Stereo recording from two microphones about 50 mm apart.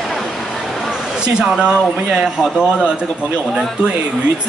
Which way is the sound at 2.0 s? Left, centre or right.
Centre.